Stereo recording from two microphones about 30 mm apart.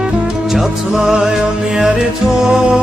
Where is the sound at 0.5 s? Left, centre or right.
Centre.